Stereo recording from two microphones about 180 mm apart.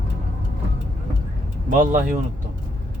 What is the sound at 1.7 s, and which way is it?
Speech, 45° right (ahead or behind).